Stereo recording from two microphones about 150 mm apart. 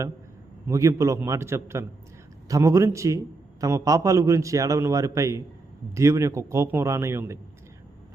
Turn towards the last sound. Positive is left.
turn(degrees=-15)  # may be behind; listen again after turning